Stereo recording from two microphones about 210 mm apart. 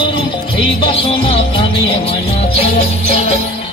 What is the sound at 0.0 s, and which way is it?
Music, 25° left (ahead or behind).